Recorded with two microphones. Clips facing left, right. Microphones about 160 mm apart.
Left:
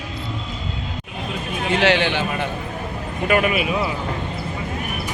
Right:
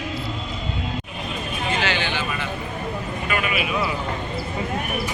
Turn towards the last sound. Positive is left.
turn(degrees=50)  # may be behind; listen again after turning